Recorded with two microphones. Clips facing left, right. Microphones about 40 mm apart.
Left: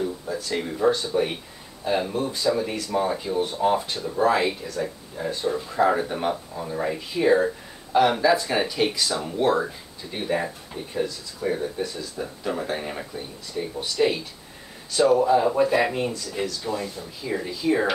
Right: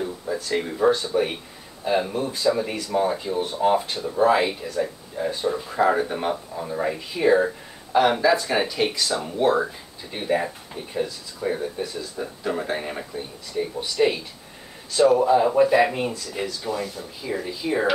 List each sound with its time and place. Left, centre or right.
0.0 s a sound: centre
1.1 s speech: centre
16.9 s speech: centre